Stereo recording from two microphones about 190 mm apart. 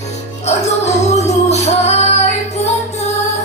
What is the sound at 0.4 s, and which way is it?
Music, 35° left (ahead or behind).